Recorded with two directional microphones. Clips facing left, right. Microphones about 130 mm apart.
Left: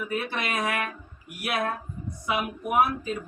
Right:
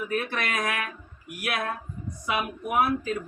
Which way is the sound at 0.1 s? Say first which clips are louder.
Even; 25° left (ahead or behind).